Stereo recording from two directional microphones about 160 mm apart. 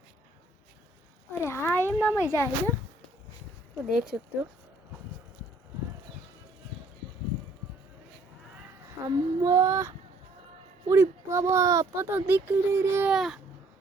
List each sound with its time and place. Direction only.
1.3 s speech: 15° left (ahead or behind)
3.8 s speech: 5° right (ahead or behind)
9.0 s female singing: 20° right (ahead or behind)
10.8 s a child's voice: 15° right (ahead or behind)
13.1 s speech: centre (ahead or behind)